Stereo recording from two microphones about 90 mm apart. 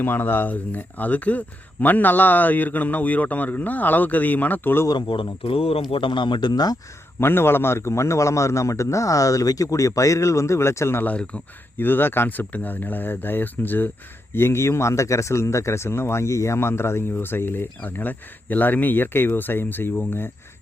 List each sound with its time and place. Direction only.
0.0 s speech: 20° left (ahead or behind)
4.9 s speech: 65° left (ahead or behind); by 5.8 s 90° left
5.9 s speech: 70° left (ahead or behind); by 6.7 s 50° left (ahead or behind)
7.2 s a man's voice: 25° left (ahead or behind)
11.0 s speech: 15° left (ahead or behind)